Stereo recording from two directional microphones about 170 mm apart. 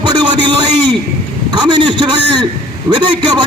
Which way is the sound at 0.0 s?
25° right (ahead or behind).